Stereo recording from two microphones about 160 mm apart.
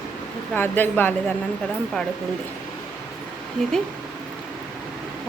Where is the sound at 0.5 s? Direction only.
10° left (ahead or behind).